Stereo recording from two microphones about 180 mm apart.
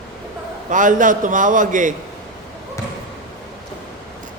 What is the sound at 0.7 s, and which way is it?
A man's voice, 45° right (ahead or behind).